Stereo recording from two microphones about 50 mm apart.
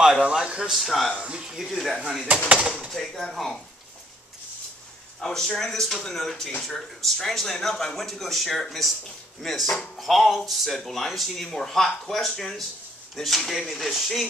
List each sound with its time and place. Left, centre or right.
0.2 s speech: centre
0.7 s speech: centre
1.1 s speech: right
1.6 s speech: centre
2.3 s speech: right
2.9 s speech: centre
5.2 s speech: centre